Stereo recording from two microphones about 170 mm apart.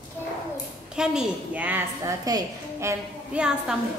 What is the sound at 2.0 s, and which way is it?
A woman's voice, 20° right (ahead or behind).